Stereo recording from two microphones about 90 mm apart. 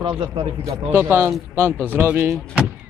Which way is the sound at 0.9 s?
25° right (ahead or behind).